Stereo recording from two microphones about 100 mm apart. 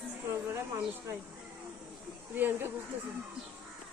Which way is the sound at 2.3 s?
20° right (ahead or behind).